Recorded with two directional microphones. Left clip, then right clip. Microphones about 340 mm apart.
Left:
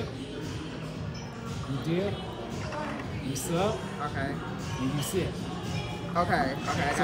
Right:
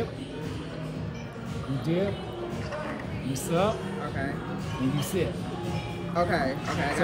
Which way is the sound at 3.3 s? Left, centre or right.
Centre.